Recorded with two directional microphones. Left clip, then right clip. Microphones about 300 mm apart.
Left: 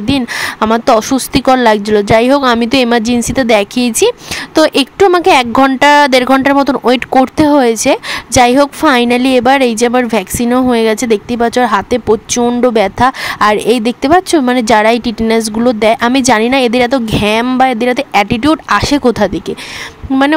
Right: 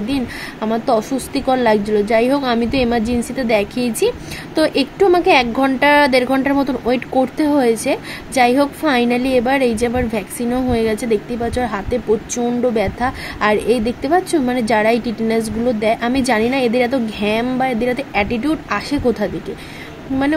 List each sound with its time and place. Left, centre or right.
0.1 s speech: left